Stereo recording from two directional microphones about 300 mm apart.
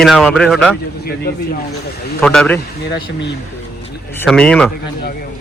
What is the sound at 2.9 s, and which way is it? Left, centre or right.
Speech, left.